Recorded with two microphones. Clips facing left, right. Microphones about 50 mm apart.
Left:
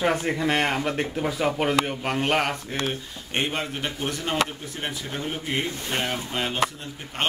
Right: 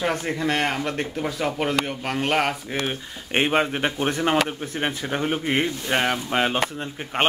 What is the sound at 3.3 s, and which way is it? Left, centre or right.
Speech, right.